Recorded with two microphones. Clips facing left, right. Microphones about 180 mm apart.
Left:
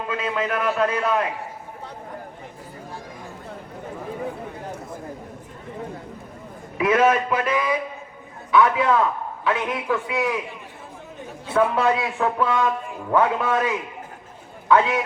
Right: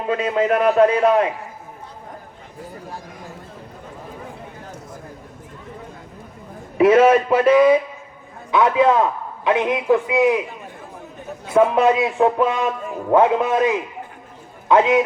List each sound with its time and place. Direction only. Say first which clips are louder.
0.2 s a man's voice: right 7 dB; 35° right (ahead or behind)
6.7 s a man's voice: right 6 dB; 30° right (ahead or behind)
11.5 s a man's voice: right 5 dB; 20° right (ahead or behind)
14.7 s a man's voice: right 3 dB; 20° right (ahead or behind)